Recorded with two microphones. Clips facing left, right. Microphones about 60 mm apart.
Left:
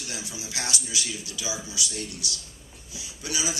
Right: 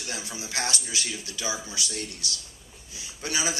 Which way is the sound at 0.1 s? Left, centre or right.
Right.